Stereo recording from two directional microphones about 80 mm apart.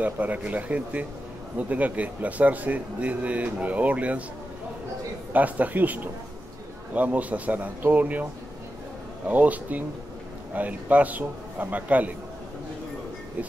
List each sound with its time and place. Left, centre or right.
0.0 s a man's voice: right
5.3 s a man's voice: centre
9.3 s a man's voice: right